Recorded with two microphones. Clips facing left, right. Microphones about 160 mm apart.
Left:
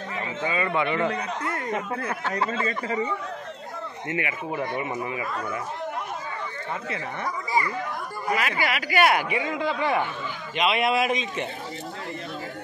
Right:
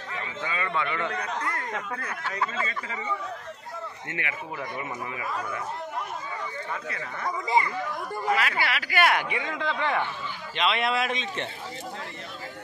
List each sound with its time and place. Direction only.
0.5 s speech: 10° left (ahead or behind)
0.8 s speech: 30° left (ahead or behind)
2.0 s speech: 50° left (ahead or behind)
2.4 s speech: 35° left (ahead or behind)
4.1 s speech: 10° left (ahead or behind)
7.2 s speech: 25° right (ahead or behind)
8.3 s speech: 15° left (ahead or behind)